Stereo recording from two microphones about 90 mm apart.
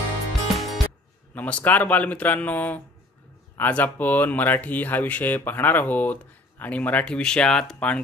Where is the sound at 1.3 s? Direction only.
20° left (ahead or behind).